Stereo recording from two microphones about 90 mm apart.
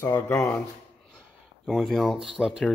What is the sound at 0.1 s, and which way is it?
Speech, 35° left (ahead or behind).